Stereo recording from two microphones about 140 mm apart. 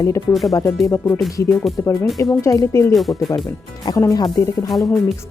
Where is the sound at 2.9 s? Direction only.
Centre (ahead or behind).